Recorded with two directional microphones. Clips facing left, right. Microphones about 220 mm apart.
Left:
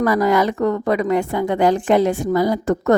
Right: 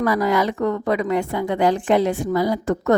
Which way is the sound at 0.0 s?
45° left (ahead or behind).